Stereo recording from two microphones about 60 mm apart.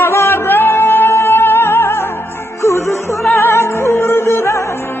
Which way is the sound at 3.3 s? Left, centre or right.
Left.